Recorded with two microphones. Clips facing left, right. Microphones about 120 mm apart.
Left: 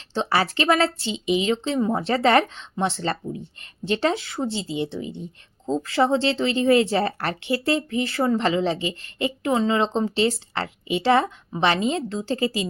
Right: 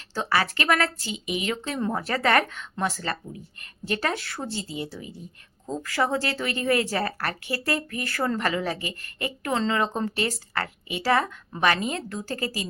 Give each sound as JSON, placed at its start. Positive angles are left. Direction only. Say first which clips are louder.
{"t": 0.1, "sound": "speech", "louder": "left 3 dB", "side_deg": 25}